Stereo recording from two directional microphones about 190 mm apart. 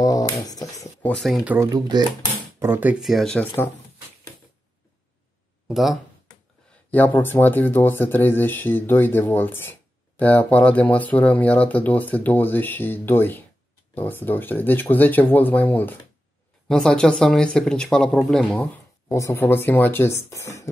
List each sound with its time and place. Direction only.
0.0 s speech: 20° left (ahead or behind)
1.0 s speech: 5° left (ahead or behind)
1.4 s speech: 10° right (ahead or behind)
2.6 s speech: 10° right (ahead or behind); by 3.7 s 10° left (ahead or behind)
5.7 s a sound: centre (ahead or behind)
6.9 s speech: 10° left (ahead or behind)
19.0 s speech: 15° left (ahead or behind)